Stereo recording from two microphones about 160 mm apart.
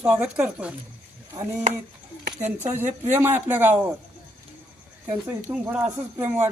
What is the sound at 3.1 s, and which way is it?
Speech, 10° right (ahead or behind).